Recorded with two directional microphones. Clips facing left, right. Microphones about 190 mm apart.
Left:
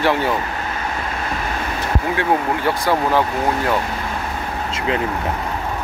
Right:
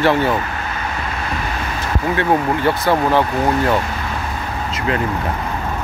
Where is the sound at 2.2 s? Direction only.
10° left (ahead or behind).